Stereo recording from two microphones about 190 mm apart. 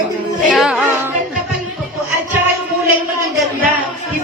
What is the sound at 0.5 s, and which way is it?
Music, centre (ahead or behind).